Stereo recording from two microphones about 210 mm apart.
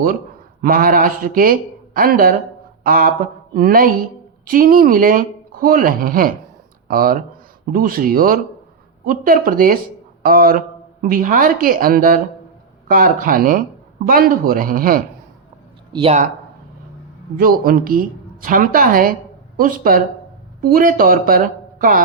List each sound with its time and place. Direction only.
0.6 s a woman's voice: 45° right (ahead or behind)
15.9 s speech: 25° right (ahead or behind)
17.3 s a woman's voice: 45° right (ahead or behind)